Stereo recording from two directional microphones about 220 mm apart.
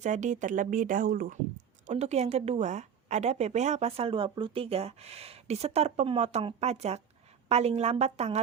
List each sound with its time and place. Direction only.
0.0 s a woman's voice: 35° right (ahead or behind)